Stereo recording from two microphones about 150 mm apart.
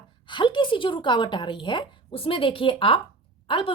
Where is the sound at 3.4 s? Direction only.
40° left (ahead or behind).